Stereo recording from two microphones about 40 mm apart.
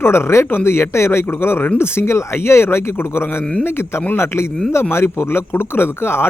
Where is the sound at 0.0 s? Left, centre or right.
Left.